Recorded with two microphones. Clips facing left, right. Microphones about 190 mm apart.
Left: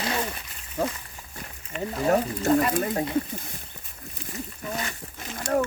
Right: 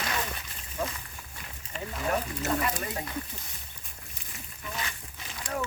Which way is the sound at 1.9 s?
35° left (ahead or behind).